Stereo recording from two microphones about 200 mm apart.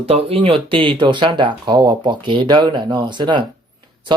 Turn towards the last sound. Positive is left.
turn(degrees=-25)  # may be behind; listen again after turning